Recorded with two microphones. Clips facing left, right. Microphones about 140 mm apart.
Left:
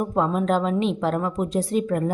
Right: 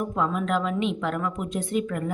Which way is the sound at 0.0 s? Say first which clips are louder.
Left 4 dB; 35° left (ahead or behind).